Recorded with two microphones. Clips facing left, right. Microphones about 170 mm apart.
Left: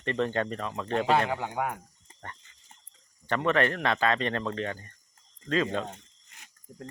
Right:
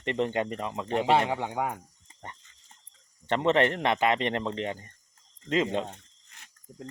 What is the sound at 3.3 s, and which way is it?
Speech, 25° right (ahead or behind).